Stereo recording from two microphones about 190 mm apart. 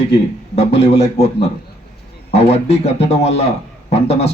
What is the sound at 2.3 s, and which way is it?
Speech, 35° left (ahead or behind).